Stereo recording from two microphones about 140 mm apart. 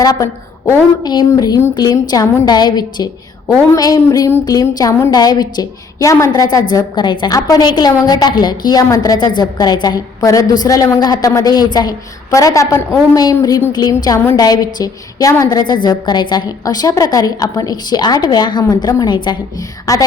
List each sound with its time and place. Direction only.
0.0 s a woman's voice: 25° left (ahead or behind)